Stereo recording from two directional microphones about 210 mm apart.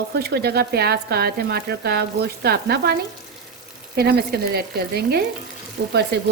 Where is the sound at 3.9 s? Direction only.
50° right (ahead or behind).